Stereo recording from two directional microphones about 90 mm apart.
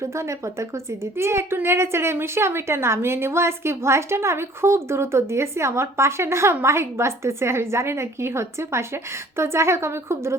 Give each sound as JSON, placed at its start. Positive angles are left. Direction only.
{"t": 0.0, "sound": "a woman's voice", "side_deg": -35}